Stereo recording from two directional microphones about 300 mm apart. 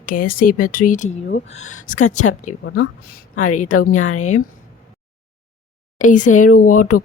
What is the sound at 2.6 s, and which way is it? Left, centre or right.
A woman's voice, left.